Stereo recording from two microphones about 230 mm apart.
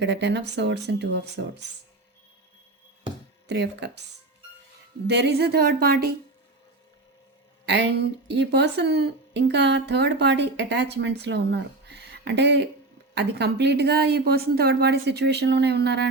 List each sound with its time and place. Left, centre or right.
0.0 s speech: right
3.4 s speech: right
5.0 s speech: right
7.6 s speech: right